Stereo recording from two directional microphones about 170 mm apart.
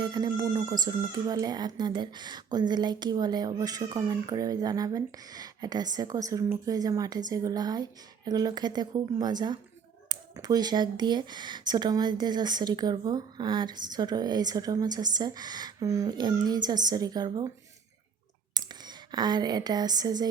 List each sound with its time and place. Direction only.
0.0 s speech: 25° right (ahead or behind)
18.5 s speech: 25° right (ahead or behind)